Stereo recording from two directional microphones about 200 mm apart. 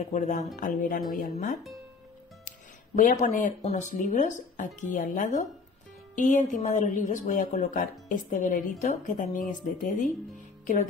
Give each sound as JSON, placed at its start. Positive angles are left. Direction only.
{"t": 0.0, "sound": "speech", "side_deg": 40}
{"t": 3.0, "sound": "speech", "side_deg": 40}